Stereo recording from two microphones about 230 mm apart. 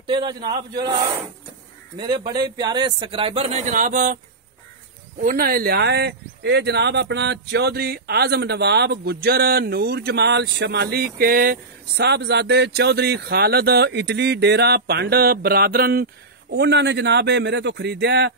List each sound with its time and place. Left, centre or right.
0.0 s a man's voice: centre
5.2 s speech: right